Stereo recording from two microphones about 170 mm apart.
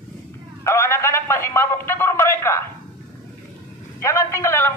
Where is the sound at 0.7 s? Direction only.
15° left (ahead or behind).